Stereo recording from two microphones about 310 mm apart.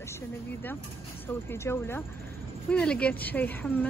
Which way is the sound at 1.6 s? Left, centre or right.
Centre.